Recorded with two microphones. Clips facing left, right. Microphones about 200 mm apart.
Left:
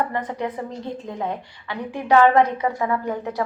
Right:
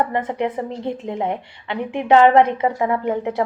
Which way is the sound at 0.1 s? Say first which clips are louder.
Right 4 dB; 25° right (ahead or behind).